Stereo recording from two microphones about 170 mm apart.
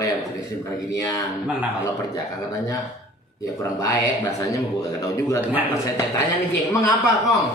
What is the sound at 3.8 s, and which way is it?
Speech, 20° left (ahead or behind).